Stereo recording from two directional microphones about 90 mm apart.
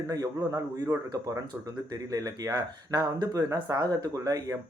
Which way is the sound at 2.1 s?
40° right (ahead or behind).